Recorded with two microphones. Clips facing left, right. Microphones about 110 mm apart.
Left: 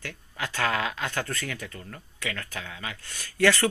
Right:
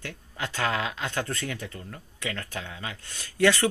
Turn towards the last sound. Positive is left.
turn(degrees=-20)  # may be behind; listen again after turning